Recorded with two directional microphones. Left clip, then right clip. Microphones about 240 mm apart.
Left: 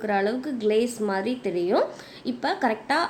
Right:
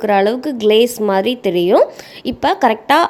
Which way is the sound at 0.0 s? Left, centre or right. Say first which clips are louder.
Right 11 dB; right.